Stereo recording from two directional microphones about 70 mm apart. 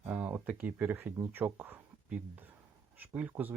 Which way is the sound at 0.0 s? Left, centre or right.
Right.